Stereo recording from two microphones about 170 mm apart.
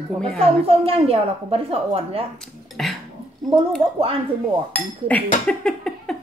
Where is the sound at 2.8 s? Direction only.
Centre (ahead or behind).